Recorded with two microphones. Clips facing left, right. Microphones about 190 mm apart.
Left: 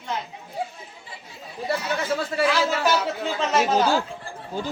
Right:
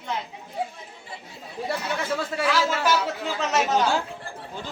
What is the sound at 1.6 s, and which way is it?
Speech, 5° left (ahead or behind).